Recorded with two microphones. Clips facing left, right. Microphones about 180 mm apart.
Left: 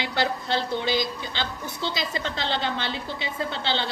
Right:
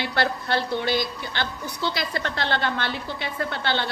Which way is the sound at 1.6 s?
20° left (ahead or behind).